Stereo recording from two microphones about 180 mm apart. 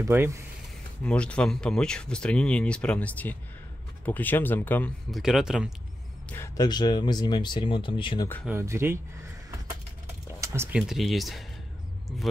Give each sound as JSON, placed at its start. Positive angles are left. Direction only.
{"t": 0.0, "sound": "speech", "side_deg": -15}
{"t": 1.0, "sound": "speech", "side_deg": 5}
{"t": 5.1, "sound": "speech", "side_deg": -5}
{"t": 6.3, "sound": "speech", "side_deg": 15}
{"t": 8.5, "sound": "speech", "side_deg": -15}
{"t": 10.4, "sound": "speech", "side_deg": -15}